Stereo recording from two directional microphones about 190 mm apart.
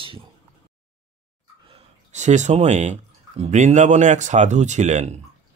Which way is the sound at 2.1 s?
40° right (ahead or behind).